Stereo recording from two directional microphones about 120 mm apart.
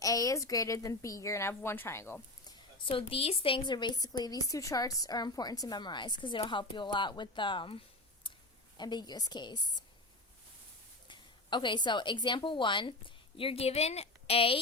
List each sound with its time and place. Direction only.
0.0 s a woman's voice: 30° left (ahead or behind)
2.7 s a woman's voice: 45° left (ahead or behind)
8.8 s a woman's voice: 40° left (ahead or behind)
11.1 s a woman's voice: 40° left (ahead or behind)